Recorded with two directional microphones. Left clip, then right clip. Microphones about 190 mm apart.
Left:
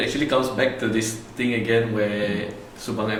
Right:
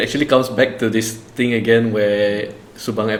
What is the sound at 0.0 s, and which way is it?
Speech, 55° right (ahead or behind).